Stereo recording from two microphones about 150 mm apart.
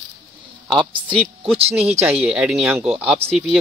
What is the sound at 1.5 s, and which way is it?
Speech, 45° right (ahead or behind).